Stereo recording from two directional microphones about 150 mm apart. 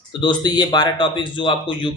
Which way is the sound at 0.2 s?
30° left (ahead or behind).